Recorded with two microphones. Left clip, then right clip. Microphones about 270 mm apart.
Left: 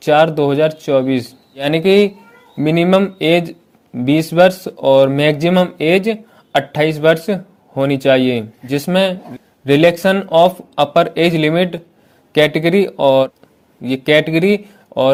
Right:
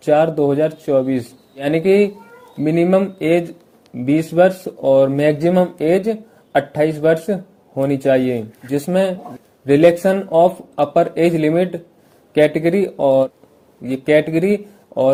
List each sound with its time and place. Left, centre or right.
0.0 s speech: left